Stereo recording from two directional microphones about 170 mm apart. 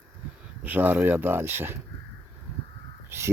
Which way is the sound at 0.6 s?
10° right (ahead or behind).